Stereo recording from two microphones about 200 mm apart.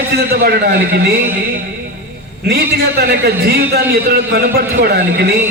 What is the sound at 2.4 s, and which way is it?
A man's voice, 50° right (ahead or behind).